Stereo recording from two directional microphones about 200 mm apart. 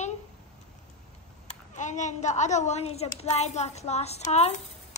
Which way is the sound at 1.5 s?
35° left (ahead or behind).